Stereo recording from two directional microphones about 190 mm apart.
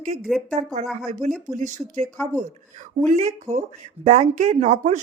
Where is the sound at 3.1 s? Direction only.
35° right (ahead or behind).